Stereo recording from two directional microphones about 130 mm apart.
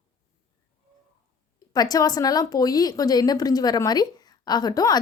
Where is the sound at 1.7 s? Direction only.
30° left (ahead or behind).